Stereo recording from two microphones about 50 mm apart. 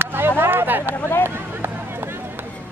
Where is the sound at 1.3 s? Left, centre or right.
Right.